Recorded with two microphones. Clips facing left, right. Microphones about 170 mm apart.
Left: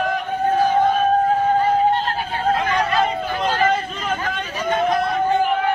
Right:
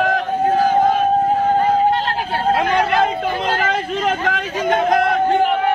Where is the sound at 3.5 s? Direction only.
75° right (ahead or behind).